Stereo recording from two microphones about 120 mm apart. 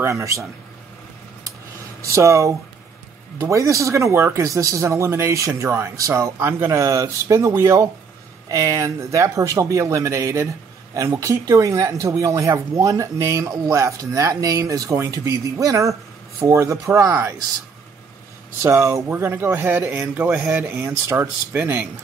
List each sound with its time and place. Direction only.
0.0 s speech: 25° right (ahead or behind)
2.1 s speech: 25° right (ahead or behind)
18.6 s speech: 25° right (ahead or behind)